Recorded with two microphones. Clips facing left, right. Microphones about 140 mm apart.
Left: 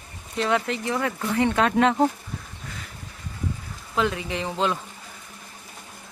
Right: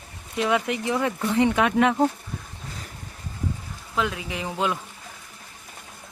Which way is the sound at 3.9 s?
5° right (ahead or behind).